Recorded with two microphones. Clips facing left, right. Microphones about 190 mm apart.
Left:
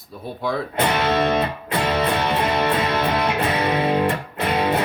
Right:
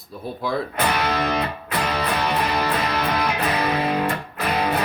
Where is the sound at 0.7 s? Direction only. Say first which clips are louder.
Left 6 dB; 25° left (ahead or behind).